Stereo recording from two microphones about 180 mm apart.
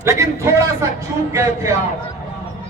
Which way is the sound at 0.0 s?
15° right (ahead or behind).